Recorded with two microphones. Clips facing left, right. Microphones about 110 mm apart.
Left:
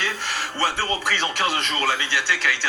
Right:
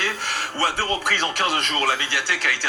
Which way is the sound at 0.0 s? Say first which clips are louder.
Right 1 dB; 60° right (ahead or behind).